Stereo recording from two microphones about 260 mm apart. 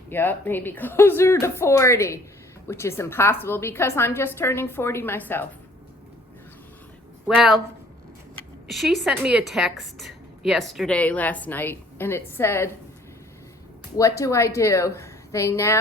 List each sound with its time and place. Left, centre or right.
0.1 s a woman's voice: centre
7.3 s a woman's voice: centre
8.6 s a woman's voice: centre
13.9 s a woman's voice: centre